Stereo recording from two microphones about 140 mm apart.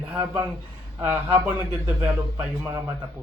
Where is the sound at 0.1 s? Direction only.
10° right (ahead or behind).